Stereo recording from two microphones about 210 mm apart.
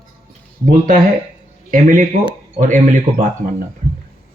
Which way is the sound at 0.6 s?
40° right (ahead or behind).